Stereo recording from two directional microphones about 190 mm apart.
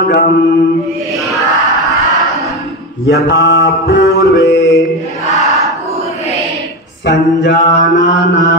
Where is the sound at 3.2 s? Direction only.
65° left (ahead or behind).